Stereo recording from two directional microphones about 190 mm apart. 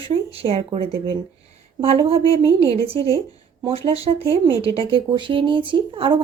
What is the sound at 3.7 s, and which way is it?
Speech, 30° right (ahead or behind).